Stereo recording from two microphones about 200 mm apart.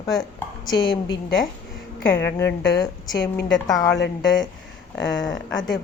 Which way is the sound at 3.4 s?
65° left (ahead or behind).